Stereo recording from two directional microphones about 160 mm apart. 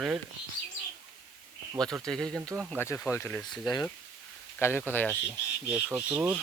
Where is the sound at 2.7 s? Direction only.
15° left (ahead or behind).